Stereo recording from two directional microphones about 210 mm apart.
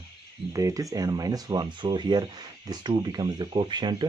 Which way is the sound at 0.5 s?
15° right (ahead or behind).